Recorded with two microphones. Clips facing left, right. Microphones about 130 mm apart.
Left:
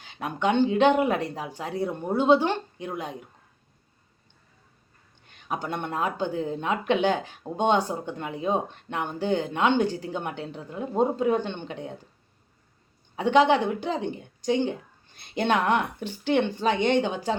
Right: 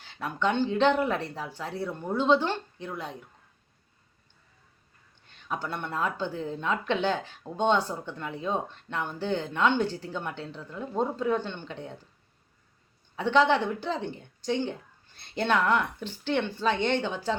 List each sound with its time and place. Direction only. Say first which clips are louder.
0.0 s speech: left 2 dB; 15° left (ahead or behind)
5.2 s speech: left 2 dB; 15° left (ahead or behind)
13.1 s speech: left 3 dB; 15° left (ahead or behind)